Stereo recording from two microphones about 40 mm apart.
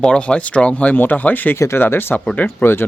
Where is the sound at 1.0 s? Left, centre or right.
Left.